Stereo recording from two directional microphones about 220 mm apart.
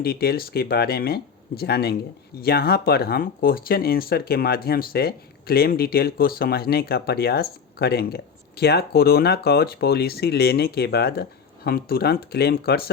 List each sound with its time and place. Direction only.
0.0 s speech: 45° left (ahead or behind)